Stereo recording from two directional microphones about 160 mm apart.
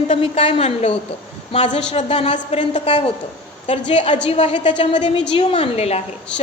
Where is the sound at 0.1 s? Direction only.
35° left (ahead or behind).